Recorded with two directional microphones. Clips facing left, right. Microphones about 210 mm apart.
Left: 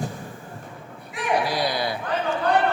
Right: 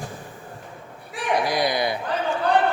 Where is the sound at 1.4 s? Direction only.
15° right (ahead or behind).